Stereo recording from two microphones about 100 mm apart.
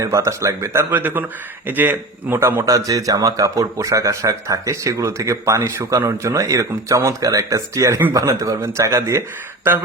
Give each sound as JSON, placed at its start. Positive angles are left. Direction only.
{"t": 0.0, "sound": "speech", "side_deg": -30}
{"t": 2.6, "sound": "a man's voice", "side_deg": -35}